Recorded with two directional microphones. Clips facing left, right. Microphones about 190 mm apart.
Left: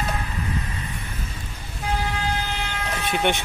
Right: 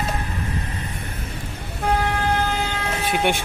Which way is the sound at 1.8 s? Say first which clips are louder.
Right 5 dB; 55° right (ahead or behind).